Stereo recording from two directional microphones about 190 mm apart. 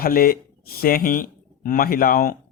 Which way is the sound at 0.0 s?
50° left (ahead or behind).